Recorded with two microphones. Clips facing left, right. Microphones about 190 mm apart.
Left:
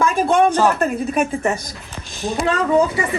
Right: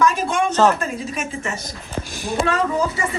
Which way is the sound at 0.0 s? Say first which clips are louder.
Left 4 dB; 55° left (ahead or behind).